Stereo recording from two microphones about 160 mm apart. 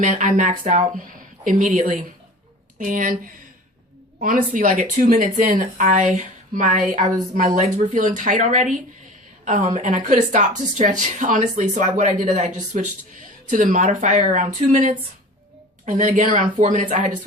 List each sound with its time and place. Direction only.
0.0 s a woman's voice: 55° right (ahead or behind)